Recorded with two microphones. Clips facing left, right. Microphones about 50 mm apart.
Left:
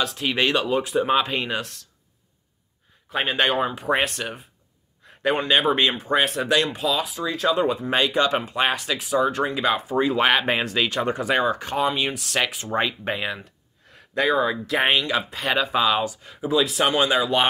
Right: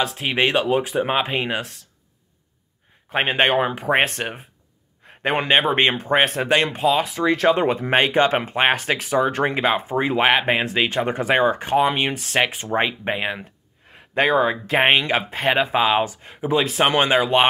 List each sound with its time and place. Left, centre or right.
0.0 s speech: right
0.7 s speech: right
3.1 s speech: right
5.0 s a sound: right
5.8 s speech: right
7.1 s speech: right
13.9 s speech: right
14.7 s speech: right